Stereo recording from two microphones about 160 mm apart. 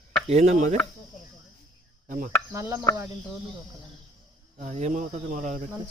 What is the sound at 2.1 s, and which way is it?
Speech, 55° right (ahead or behind).